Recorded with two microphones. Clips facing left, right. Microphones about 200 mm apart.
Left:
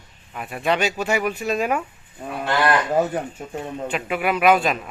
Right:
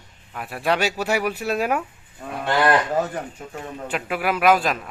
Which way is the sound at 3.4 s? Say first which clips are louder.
Left 3 dB; 25° left (ahead or behind).